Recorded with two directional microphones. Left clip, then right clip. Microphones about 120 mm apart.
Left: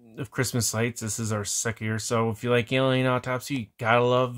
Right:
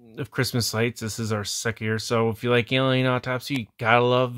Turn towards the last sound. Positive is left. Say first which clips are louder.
# right 2 dB
turn(degrees=-35)  # may be behind; listen again after turning